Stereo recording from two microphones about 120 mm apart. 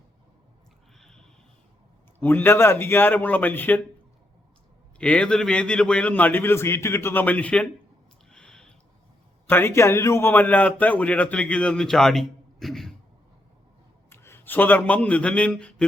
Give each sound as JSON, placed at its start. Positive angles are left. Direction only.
{"t": 0.9, "sound": "a sound", "side_deg": 5}
{"t": 2.1, "sound": "a man's voice", "side_deg": 20}
{"t": 4.9, "sound": "a man's voice", "side_deg": 10}
{"t": 8.3, "sound": "a sound", "side_deg": 5}
{"t": 9.5, "sound": "a man's voice", "side_deg": 20}
{"t": 14.1, "sound": "speech", "side_deg": 20}